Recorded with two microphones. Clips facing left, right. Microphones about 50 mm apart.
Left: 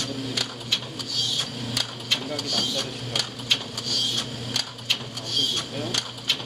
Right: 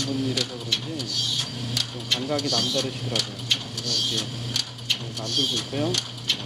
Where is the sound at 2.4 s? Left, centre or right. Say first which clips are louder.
Right 3 dB; centre.